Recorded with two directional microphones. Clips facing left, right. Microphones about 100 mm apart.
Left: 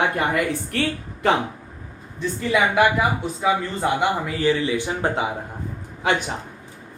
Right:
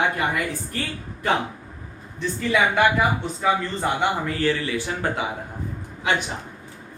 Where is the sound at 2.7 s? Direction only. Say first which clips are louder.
Left 1 dB; 5° left (ahead or behind).